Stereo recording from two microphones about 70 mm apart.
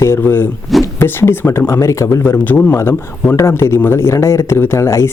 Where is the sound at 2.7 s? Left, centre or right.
Left.